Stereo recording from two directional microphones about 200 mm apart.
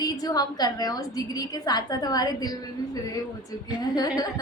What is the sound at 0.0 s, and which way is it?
A woman's voice, 20° left (ahead or behind).